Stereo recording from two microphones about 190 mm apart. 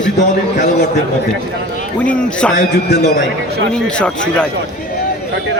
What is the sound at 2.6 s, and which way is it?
Speech, 60° left (ahead or behind).